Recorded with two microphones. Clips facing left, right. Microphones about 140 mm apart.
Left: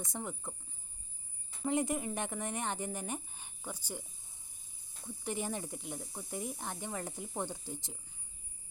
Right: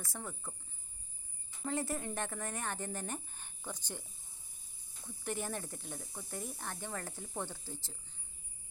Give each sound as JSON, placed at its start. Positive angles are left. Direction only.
{"t": 0.0, "sound": "speech", "side_deg": 20}
{"t": 1.6, "sound": "speech", "side_deg": 20}
{"t": 5.0, "sound": "speech", "side_deg": 15}